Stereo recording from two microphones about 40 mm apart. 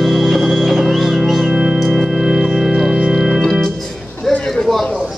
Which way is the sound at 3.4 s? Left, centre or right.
Centre.